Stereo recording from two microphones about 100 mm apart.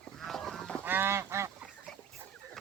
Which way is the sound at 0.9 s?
25° right (ahead or behind).